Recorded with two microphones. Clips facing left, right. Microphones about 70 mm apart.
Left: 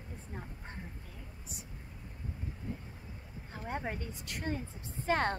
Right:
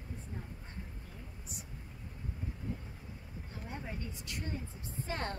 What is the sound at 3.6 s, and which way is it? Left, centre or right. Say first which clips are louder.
Speech: left 6 dB; left.